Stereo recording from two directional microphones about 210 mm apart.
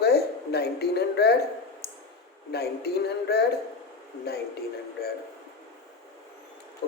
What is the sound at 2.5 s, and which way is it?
Speech, 50° left (ahead or behind).